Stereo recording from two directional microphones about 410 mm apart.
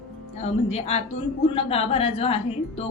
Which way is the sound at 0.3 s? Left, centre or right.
Centre.